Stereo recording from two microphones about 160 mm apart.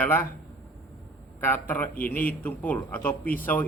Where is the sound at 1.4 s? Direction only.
10° left (ahead or behind).